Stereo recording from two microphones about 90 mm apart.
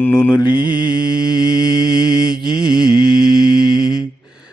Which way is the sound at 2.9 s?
55° left (ahead or behind).